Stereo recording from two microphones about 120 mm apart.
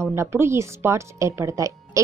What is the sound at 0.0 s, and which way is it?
A woman's voice, 20° right (ahead or behind).